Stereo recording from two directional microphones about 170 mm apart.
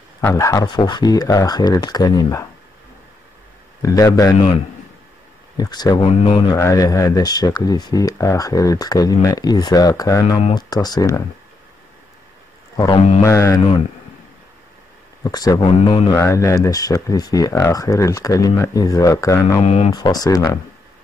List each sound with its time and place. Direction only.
0.2 s speech: 15° left (ahead or behind)
3.8 s speech: 20° left (ahead or behind)
5.6 s speech: 25° left (ahead or behind)
6.5 s speech: 20° left (ahead or behind)
12.7 s a man's voice: 25° left (ahead or behind)
15.2 s speech: 20° left (ahead or behind)
16.2 s speech: 15° left (ahead or behind)
19.6 s speech: 40° left (ahead or behind)
19.9 s speech: 20° left (ahead or behind)